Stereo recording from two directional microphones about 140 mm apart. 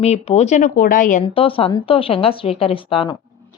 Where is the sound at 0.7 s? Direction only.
85° left; by 1.3 s 70° left (ahead or behind).